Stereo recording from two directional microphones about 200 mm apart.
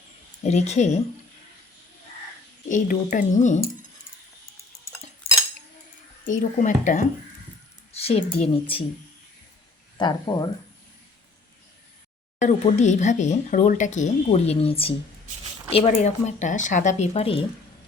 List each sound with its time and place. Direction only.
0.4 s speech: 35° left (ahead or behind)
2.6 s speech: 40° left (ahead or behind)
6.2 s speech: 40° left (ahead or behind)
10.0 s speech: 20° left (ahead or behind)
12.4 s speech: 35° left (ahead or behind)